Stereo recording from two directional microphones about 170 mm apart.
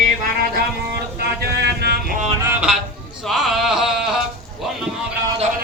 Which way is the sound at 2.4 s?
10° right (ahead or behind).